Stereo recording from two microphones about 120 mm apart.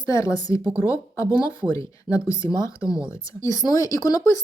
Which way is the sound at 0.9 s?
25° left (ahead or behind).